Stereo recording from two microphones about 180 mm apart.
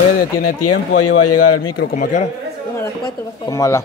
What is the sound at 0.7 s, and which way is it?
Speech, 90° left.